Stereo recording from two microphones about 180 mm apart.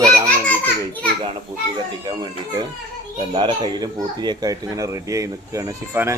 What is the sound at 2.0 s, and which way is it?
Speech, 25° right (ahead or behind).